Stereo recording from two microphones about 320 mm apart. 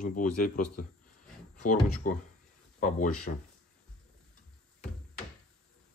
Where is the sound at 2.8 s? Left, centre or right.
Left.